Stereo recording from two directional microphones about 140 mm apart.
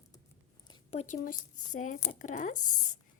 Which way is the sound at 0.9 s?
65° left (ahead or behind).